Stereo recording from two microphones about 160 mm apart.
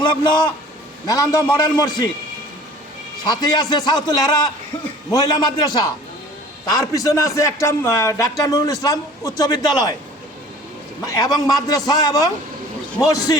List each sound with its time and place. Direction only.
0.0 s a man's voice: 30° left (ahead or behind)
3.2 s speech: 25° left (ahead or behind)
6.9 s speech: 20° left (ahead or behind)
11.0 s speech: 20° left (ahead or behind)